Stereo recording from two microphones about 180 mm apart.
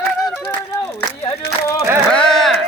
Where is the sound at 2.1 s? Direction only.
5° left (ahead or behind).